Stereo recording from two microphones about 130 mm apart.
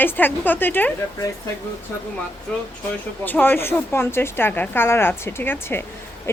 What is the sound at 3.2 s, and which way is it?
Speech, 15° left (ahead or behind).